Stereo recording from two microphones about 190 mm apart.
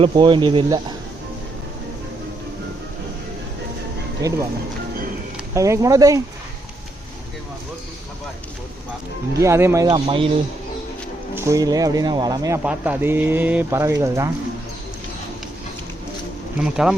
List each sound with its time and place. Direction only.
0.0 s speech: 25° right (ahead or behind)
4.2 s speech: 15° right (ahead or behind)
5.5 s speech: 15° right (ahead or behind)
9.4 s speech: 15° right (ahead or behind)
11.3 s speech: 15° right (ahead or behind)
12.6 s speech: 10° right (ahead or behind)
16.6 s speech: 5° right (ahead or behind)